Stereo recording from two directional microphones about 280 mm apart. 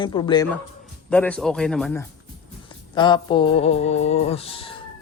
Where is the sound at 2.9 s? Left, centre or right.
Centre.